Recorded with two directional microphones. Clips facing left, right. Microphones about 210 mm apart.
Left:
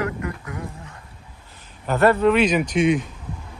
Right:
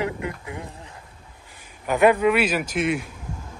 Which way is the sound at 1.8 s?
15° right (ahead or behind).